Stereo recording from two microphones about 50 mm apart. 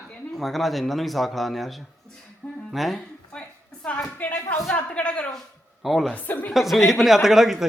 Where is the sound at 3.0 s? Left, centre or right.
Left.